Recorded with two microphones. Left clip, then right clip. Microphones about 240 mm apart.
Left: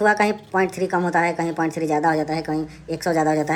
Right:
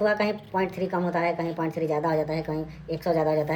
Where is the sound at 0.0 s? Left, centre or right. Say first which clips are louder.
Left 6 dB; centre.